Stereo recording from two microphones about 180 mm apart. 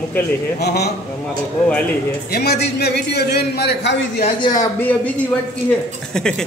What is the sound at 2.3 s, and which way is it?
A man's voice, 65° left (ahead or behind).